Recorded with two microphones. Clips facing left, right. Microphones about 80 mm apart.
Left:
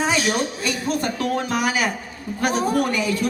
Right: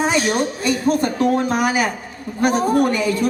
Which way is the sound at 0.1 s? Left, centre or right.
Right.